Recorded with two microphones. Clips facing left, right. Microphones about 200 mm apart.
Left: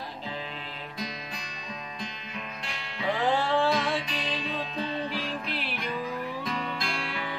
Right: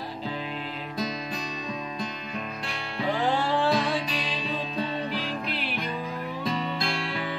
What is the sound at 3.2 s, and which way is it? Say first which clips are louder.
Music: left 1 dB; centre (ahead or behind).